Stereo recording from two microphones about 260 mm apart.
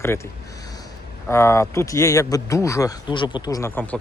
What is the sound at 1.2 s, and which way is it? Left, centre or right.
Speech, centre.